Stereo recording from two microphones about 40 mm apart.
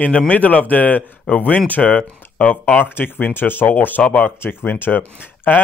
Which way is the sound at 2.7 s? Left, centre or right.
Left.